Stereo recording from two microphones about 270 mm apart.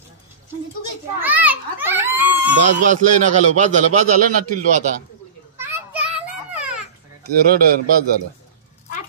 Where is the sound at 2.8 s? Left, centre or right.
Right.